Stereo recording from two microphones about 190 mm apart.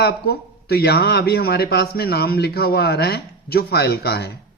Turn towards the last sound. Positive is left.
turn(degrees=55)  # may be behind; listen again after turning